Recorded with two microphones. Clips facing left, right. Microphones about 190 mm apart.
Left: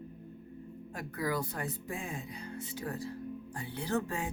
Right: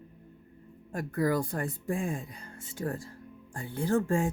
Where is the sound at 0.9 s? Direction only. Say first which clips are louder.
Right 6 dB; 50° right (ahead or behind).